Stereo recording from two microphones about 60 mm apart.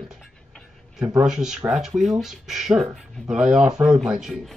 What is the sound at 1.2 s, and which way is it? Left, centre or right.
Speech, centre.